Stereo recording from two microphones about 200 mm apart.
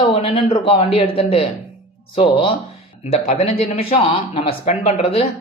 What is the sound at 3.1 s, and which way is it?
Speech, 30° left (ahead or behind).